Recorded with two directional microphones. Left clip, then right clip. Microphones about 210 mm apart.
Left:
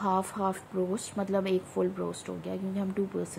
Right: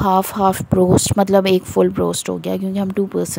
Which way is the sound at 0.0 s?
45° right (ahead or behind).